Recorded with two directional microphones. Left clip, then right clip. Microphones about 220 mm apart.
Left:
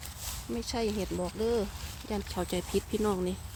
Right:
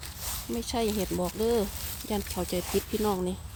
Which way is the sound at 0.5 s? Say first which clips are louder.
Right 3 dB; 15° right (ahead or behind).